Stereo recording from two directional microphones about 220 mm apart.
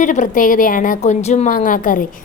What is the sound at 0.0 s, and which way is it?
A woman's voice, 35° left (ahead or behind).